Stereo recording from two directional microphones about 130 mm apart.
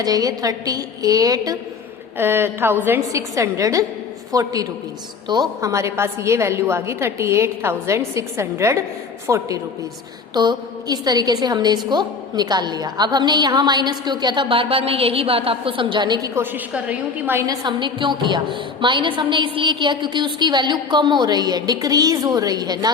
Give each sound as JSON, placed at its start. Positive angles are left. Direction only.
{"t": 0.0, "sound": "a woman's voice", "side_deg": -30}
{"t": 2.1, "sound": "a woman's voice", "side_deg": -15}
{"t": 16.3, "sound": "a woman's voice", "side_deg": -15}
{"t": 17.4, "sound": "a woman's voice", "side_deg": -30}